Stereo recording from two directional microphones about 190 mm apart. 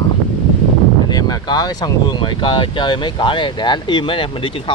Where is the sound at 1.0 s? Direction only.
20° left (ahead or behind).